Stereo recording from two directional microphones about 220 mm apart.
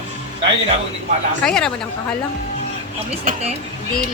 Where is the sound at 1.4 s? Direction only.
5° left (ahead or behind).